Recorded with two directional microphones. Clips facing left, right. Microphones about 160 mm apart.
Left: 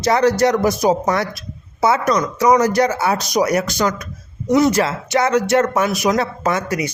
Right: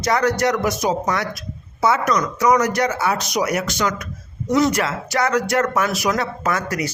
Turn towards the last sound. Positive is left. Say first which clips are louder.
# left 3 dB
turn(degrees=20)  # may be behind; listen again after turning